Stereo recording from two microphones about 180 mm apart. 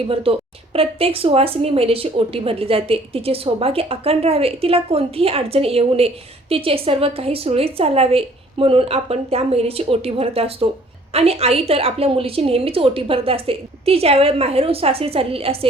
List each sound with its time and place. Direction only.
0.1 s speech: 30° right (ahead or behind)